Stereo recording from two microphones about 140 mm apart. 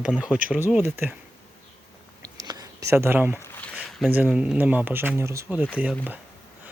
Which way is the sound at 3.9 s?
Centre (ahead or behind).